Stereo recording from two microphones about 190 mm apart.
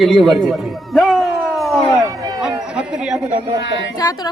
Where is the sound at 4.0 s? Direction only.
20° left (ahead or behind).